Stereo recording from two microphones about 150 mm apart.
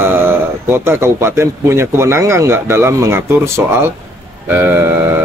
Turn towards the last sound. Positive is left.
turn(degrees=-15)  # may be behind; listen again after turning